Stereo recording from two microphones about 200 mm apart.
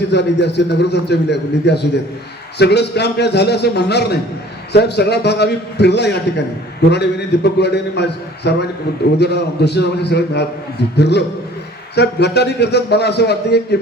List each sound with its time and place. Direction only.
0.1 s a man's voice: 60° left (ahead or behind)